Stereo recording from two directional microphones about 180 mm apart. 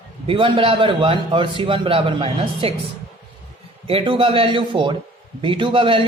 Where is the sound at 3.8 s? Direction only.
30° right (ahead or behind).